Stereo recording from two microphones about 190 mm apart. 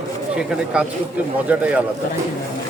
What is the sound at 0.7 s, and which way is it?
Speech, 5° right (ahead or behind).